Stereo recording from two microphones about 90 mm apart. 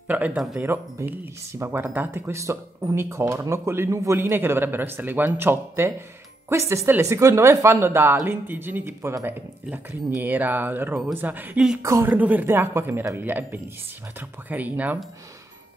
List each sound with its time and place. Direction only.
0.1 s speech: 15° right (ahead or behind)
11.8 s speech: 35° right (ahead or behind)
12.1 s speech: 20° right (ahead or behind)